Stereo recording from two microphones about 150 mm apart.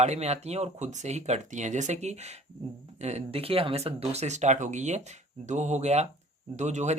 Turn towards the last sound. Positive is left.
turn(degrees=-50)  # may be behind; listen again after turning